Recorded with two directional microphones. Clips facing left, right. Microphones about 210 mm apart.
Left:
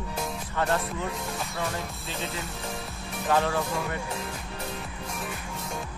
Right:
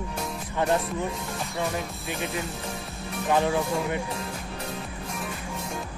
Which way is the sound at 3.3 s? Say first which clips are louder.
Right 2 dB; 15° right (ahead or behind).